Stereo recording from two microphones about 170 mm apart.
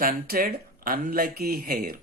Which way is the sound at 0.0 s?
60° right (ahead or behind).